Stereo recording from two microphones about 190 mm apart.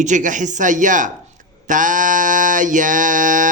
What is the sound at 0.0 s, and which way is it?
A man's voice, 40° right (ahead or behind).